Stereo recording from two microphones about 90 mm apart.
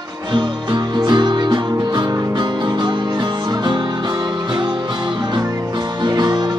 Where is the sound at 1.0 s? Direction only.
55° right (ahead or behind).